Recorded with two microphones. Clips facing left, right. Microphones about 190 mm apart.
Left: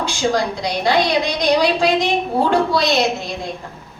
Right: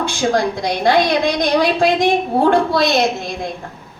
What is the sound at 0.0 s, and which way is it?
A woman's voice, 55° right (ahead or behind).